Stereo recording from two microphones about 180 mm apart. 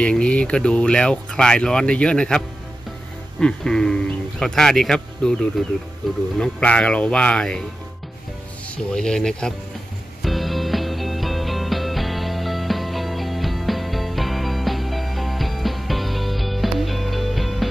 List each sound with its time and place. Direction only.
0.0 s speech: 5° left (ahead or behind)
8.9 s speech: 5° left (ahead or behind)
10.2 s music: centre (ahead or behind)